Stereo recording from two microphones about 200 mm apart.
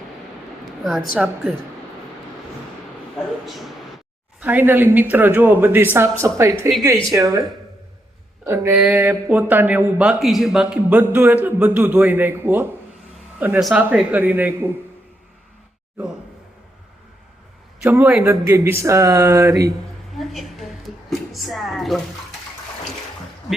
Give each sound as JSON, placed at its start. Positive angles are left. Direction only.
{"t": 1.2, "sound": "a woman's voice", "side_deg": 0}
{"t": 3.4, "sound": "a man's voice", "side_deg": 0}
{"t": 8.4, "sound": "a man's voice", "side_deg": -15}
{"t": 17.8, "sound": "a man's voice", "side_deg": -10}
{"t": 20.1, "sound": "a sound", "side_deg": 0}